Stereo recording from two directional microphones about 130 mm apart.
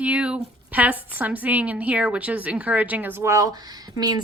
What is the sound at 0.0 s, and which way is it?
A woman's voice, 10° right (ahead or behind).